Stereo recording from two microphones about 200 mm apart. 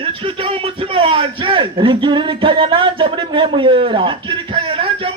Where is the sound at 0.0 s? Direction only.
25° right (ahead or behind).